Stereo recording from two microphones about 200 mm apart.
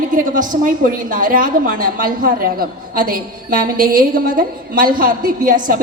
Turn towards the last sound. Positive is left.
turn(degrees=-40)  # may be behind; listen again after turning